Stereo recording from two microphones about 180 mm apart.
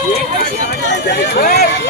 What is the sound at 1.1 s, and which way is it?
Run, 60° left (ahead or behind).